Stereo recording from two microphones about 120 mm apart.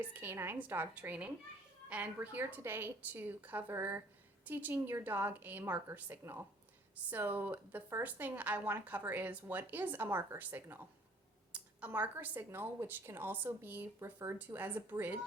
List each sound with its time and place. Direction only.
0.0 s a woman's voice: 15° right (ahead or behind)